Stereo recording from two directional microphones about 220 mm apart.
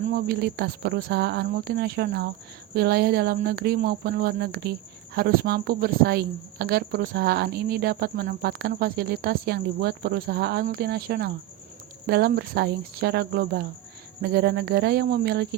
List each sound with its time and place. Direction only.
0.1 s speech: 45° right (ahead or behind)